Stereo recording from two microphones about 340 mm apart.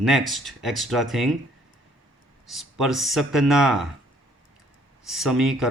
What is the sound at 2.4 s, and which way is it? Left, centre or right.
Speech, centre.